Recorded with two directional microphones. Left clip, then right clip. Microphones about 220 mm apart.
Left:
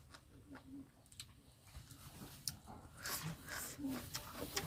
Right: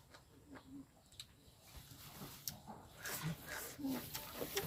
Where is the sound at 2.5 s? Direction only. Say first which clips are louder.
Left 4 dB; 5° left (ahead or behind).